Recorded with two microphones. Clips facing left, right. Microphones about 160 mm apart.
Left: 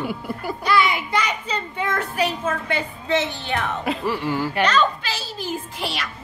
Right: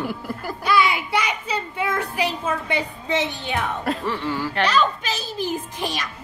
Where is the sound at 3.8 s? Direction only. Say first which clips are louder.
Left 1 dB; centre (ahead or behind).